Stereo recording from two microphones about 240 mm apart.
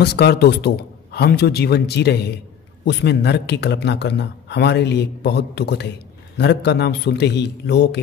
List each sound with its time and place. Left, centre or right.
0.0 s a man's voice: left